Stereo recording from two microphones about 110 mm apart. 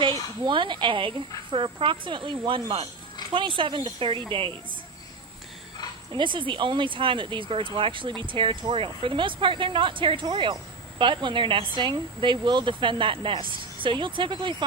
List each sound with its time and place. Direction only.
0.4 s speech: 45° right (ahead or behind)
6.1 s speech: 50° right (ahead or behind)